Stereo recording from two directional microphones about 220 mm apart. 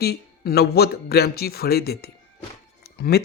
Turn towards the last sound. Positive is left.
turn(degrees=45)  # may be behind; listen again after turning